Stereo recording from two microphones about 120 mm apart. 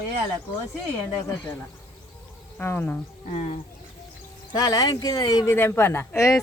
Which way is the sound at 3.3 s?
90° left.